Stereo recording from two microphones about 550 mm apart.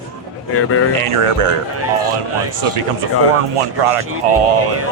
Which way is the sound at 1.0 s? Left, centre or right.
Right.